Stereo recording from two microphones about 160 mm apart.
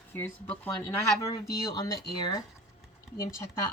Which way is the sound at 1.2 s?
20° left (ahead or behind).